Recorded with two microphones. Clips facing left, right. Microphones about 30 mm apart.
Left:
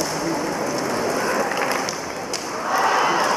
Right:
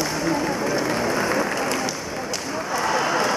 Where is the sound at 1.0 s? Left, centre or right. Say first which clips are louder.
Even; centre.